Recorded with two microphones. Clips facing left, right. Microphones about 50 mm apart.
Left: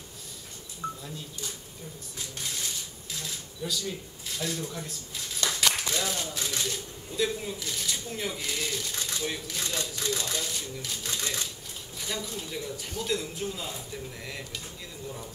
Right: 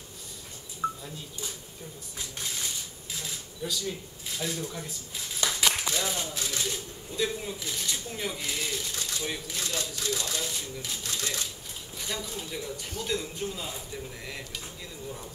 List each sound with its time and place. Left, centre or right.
0.8 s telephone dialing: right
2.1 s a man's voice: centre